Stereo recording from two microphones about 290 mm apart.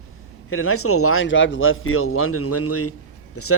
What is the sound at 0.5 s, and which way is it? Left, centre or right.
Speech, left.